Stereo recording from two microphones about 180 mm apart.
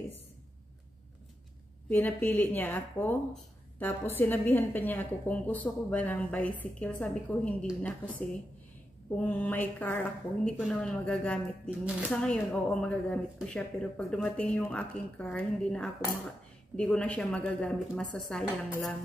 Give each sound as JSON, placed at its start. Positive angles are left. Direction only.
{"t": 1.9, "sound": "speech", "side_deg": 10}
{"t": 11.8, "sound": "speech", "side_deg": -5}
{"t": 12.2, "sound": "a woman's voice", "side_deg": 5}